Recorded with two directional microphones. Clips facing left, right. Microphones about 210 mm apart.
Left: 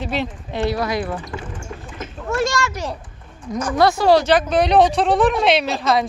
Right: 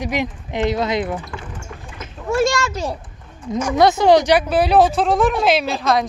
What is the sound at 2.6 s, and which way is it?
Speech, 15° right (ahead or behind).